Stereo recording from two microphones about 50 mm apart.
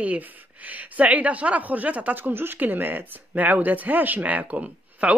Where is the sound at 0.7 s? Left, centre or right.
Right.